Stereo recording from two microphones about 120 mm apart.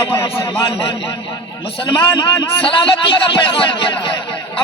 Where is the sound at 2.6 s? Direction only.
45° left (ahead or behind).